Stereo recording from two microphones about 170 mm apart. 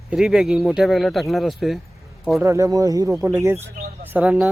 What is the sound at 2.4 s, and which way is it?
Speech, 15° right (ahead or behind).